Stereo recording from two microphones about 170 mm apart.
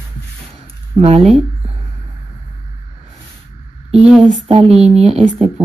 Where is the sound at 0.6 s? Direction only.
35° right (ahead or behind).